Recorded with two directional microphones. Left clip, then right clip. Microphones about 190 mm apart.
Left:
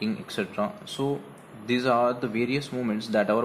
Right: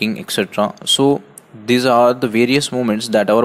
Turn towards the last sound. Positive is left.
turn(degrees=-40)  # may be behind; listen again after turning